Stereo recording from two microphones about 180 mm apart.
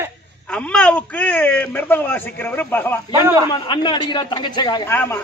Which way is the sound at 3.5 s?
25° left (ahead or behind).